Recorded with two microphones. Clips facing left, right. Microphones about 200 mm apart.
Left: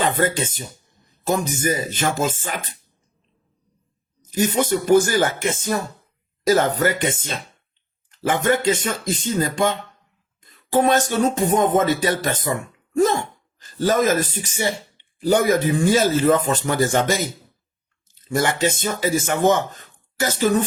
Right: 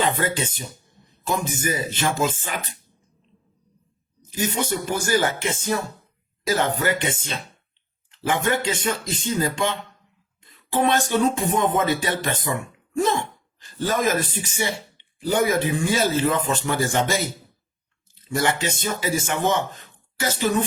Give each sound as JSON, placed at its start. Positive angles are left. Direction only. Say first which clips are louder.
{"t": 0.0, "sound": "speech", "louder": "left 3 dB", "side_deg": 45}
{"t": 4.4, "sound": "speech", "louder": "left 5 dB", "side_deg": 45}
{"t": 10.4, "sound": "music", "louder": "left 4 dB", "side_deg": 45}
{"t": 13.7, "sound": "music", "louder": "left 4 dB", "side_deg": 40}
{"t": 15.3, "sound": "speech", "louder": "left 3 dB", "side_deg": 45}
{"t": 18.3, "sound": "speech", "louder": "left 3 dB", "side_deg": 45}